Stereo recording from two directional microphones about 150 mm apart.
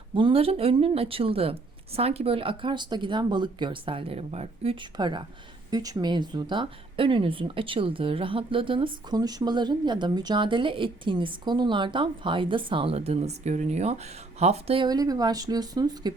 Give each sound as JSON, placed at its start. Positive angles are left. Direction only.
{"t": 0.1, "sound": "speech", "side_deg": -35}
{"t": 14.8, "sound": "speech", "side_deg": -25}